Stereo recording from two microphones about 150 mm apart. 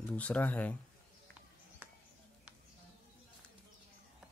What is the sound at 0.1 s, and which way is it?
Speech, 10° left (ahead or behind).